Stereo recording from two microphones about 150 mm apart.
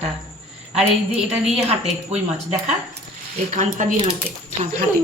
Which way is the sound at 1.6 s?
45° right (ahead or behind).